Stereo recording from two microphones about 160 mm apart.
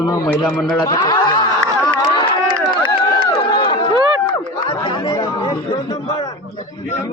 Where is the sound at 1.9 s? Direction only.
30° left (ahead or behind).